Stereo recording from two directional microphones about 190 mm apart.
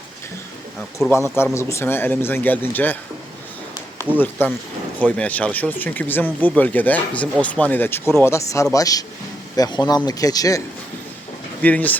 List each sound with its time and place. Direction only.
1.1 s speech: 15° left (ahead or behind)
11.6 s speech: 10° left (ahead or behind)